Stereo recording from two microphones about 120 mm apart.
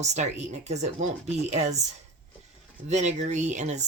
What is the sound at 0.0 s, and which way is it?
Speech, 70° right (ahead or behind).